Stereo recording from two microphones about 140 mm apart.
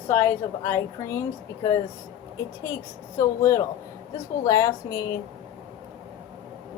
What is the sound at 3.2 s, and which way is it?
A woman's voice, 20° left (ahead or behind).